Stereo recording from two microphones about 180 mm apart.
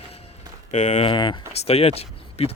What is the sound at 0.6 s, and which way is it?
Speech, 40° left (ahead or behind).